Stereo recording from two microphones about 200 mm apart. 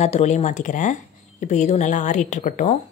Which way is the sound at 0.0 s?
35° left (ahead or behind).